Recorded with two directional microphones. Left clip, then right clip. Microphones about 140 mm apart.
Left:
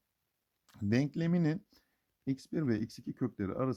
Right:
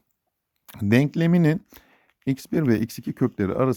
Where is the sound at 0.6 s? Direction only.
30° right (ahead or behind).